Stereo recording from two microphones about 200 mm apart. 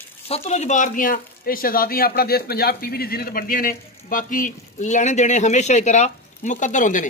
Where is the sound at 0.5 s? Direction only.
35° left (ahead or behind).